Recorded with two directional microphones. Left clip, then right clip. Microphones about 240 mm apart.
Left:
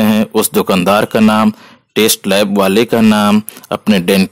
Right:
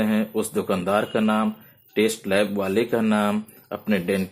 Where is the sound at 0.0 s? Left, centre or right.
Left.